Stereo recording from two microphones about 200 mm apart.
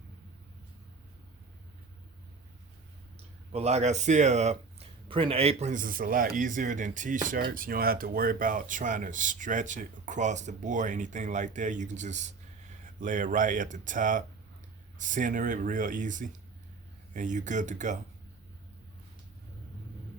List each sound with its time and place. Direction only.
3.5 s speech: 35° right (ahead or behind)